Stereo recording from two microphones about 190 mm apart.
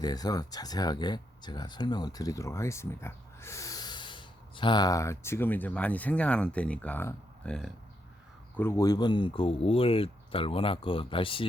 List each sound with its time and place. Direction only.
0.0 s speech: 20° left (ahead or behind)